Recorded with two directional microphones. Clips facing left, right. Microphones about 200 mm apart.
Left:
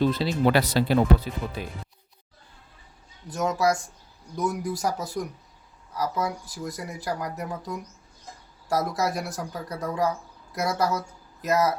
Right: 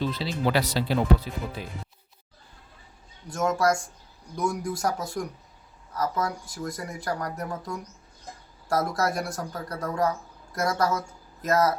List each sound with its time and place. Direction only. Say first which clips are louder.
0.0 s speech: left 5 dB; 50° left (ahead or behind)
3.2 s speech: even; 5° left (ahead or behind)